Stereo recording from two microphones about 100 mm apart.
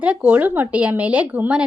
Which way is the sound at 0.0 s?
15° right (ahead or behind).